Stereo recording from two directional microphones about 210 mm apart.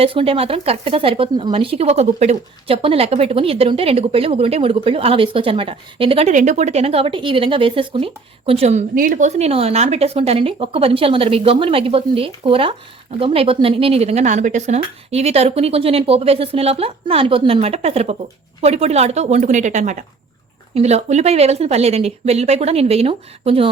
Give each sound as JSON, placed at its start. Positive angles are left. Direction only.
{"t": 0.0, "sound": "a woman's voice", "side_deg": -25}